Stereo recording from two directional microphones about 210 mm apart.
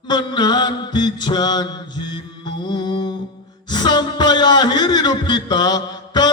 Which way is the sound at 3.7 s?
20° left (ahead or behind).